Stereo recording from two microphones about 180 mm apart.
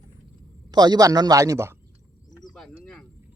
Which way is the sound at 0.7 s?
25° right (ahead or behind).